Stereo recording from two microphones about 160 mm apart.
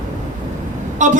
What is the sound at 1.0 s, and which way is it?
Speech, 50° right (ahead or behind).